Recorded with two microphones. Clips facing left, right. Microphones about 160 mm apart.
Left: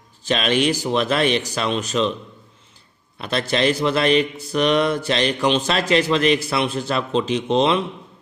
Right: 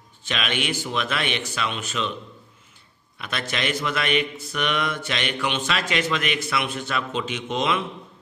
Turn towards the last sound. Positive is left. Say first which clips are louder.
# left 7 dB
turn(degrees=30)  # may be behind; listen again after turning